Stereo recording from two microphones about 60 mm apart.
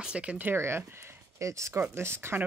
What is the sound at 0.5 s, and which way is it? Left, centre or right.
Speech, right.